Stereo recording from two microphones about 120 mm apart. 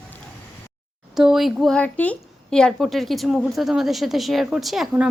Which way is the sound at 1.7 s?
15° left (ahead or behind).